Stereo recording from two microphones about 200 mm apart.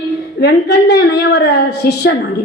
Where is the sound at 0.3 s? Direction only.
55° left (ahead or behind).